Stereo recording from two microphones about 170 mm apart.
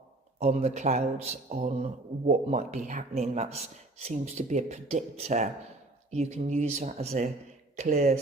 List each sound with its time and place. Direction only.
0.3 s a man's voice: 40° right (ahead or behind)